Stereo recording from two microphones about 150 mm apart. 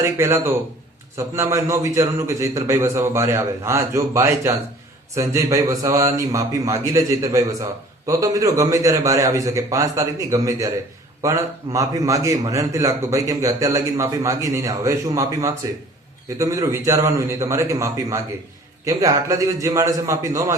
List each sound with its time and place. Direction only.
0.0 s a man's voice: 20° right (ahead or behind)